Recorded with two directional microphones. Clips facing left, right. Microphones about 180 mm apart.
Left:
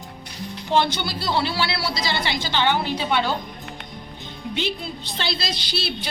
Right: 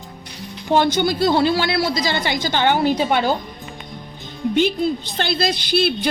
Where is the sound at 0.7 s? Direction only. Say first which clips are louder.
Right 5 dB; 45° right (ahead or behind).